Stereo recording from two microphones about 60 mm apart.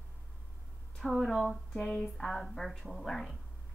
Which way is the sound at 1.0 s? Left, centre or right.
Centre.